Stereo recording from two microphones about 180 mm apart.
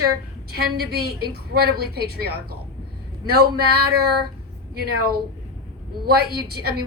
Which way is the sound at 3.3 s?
60° right (ahead or behind).